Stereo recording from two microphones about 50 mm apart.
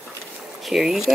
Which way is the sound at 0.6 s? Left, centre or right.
Centre.